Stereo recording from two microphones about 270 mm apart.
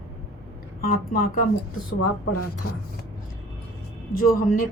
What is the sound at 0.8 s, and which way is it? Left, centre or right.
Speech, left.